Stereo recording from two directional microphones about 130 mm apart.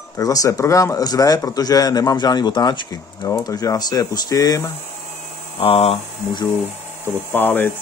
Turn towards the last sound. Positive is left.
turn(degrees=15)  # may be behind; listen again after turning